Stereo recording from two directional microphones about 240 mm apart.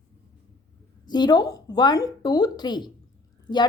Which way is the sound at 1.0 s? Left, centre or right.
Centre.